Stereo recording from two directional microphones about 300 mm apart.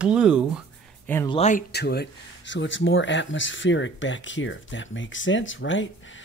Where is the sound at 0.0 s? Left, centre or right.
Centre.